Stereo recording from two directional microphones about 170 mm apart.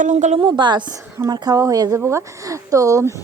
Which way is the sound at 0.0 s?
45° right (ahead or behind).